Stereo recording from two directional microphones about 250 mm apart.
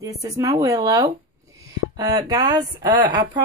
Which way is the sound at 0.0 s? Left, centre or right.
Centre.